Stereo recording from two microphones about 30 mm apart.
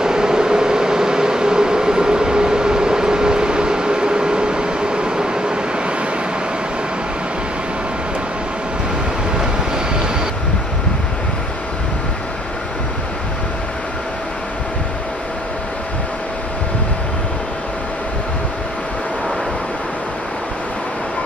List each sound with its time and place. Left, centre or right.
0.0 s vehicle: right